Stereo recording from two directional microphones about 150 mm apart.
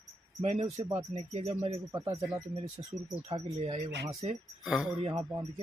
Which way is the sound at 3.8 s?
25° right (ahead or behind).